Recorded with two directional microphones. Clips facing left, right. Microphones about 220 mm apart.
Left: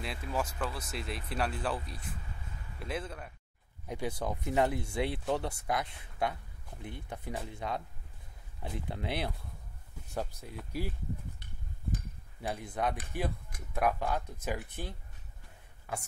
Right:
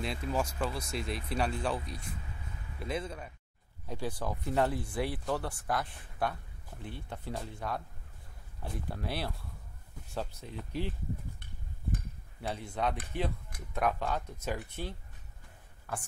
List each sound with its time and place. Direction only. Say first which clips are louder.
0.0 s speech: right 2 dB; 5° left (ahead or behind)
3.8 s speech: left 1 dB; 20° left (ahead or behind)
12.4 s speech: even; 15° left (ahead or behind)